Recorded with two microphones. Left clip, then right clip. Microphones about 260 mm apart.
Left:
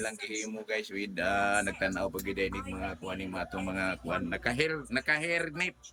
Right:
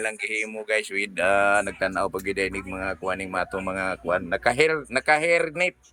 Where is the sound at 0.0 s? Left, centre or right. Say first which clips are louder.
Right 9 dB; centre.